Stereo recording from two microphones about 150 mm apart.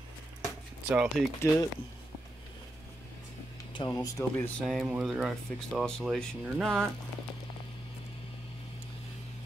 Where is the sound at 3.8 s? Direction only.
30° left (ahead or behind).